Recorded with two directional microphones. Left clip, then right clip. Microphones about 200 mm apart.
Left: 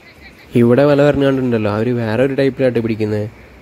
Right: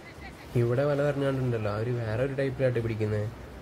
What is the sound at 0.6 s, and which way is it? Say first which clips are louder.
A man's voice: left 15 dB; 45° left (ahead or behind).